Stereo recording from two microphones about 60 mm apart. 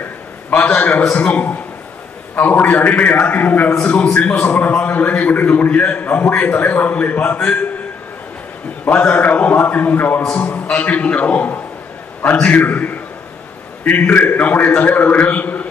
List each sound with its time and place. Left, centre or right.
0.5 s a man's voice: left
9.0 s a man's voice: left